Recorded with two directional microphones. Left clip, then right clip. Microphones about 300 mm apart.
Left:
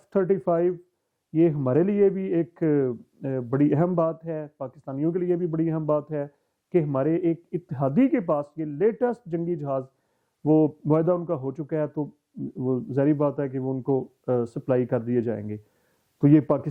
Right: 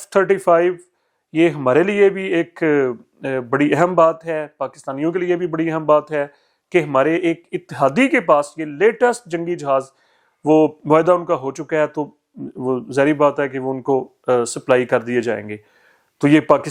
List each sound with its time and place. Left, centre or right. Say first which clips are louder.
0.0 s a man's voice: right 8 dB; centre
13.8 s speech: right 8 dB; right
14.3 s a man's voice: right 10 dB; centre